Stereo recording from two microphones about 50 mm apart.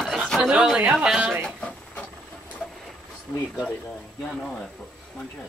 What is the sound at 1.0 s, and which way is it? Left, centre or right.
Speech, centre.